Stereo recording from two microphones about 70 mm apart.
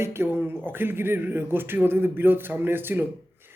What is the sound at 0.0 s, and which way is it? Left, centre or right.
Speech, right.